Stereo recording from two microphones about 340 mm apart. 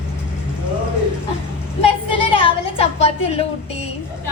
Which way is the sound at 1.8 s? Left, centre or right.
Centre.